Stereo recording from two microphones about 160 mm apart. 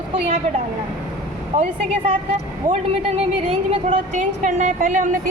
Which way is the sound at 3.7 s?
45° right (ahead or behind).